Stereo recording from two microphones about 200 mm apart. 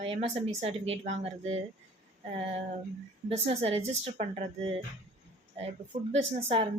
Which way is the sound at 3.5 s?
30° right (ahead or behind).